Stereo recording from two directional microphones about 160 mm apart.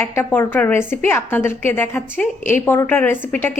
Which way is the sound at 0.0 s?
10° left (ahead or behind).